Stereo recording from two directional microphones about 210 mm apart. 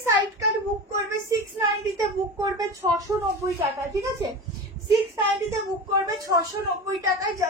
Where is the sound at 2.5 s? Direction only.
15° right (ahead or behind).